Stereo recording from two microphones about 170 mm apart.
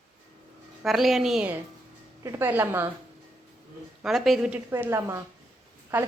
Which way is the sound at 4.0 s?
Centre (ahead or behind).